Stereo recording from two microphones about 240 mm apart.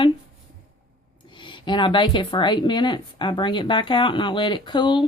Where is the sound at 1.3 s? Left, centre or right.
Centre.